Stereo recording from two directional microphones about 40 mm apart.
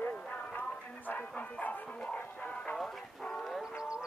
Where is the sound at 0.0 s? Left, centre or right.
Left.